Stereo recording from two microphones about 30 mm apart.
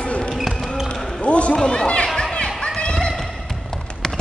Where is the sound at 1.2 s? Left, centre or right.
Left.